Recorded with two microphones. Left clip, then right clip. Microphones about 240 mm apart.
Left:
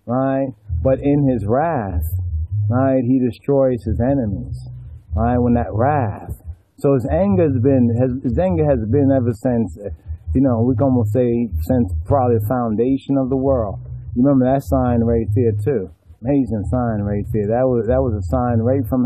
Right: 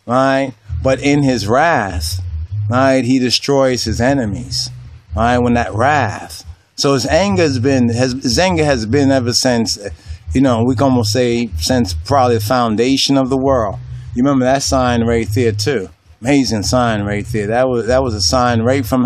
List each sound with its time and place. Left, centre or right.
0.0 s a man's voice: centre
11.1 s a man's voice: centre
13.1 s a man's voice: right